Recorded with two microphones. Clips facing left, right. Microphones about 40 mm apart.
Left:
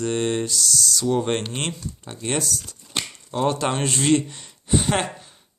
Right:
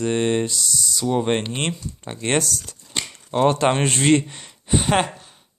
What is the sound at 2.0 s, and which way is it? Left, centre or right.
Speech, right.